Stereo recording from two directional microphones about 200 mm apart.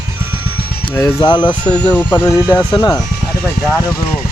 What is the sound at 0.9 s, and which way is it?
Speech, 20° left (ahead or behind).